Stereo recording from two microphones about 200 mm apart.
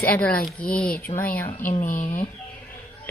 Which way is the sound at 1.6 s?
40° left (ahead or behind).